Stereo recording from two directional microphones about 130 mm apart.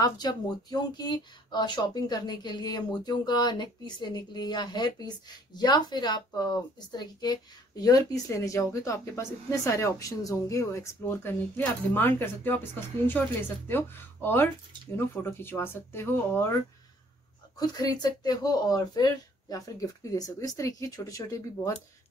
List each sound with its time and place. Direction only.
0.0 s speech: 30° left (ahead or behind)
17.6 s speech: 30° left (ahead or behind)